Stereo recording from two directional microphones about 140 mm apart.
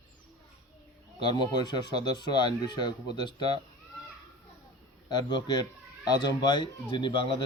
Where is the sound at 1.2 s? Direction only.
30° left (ahead or behind).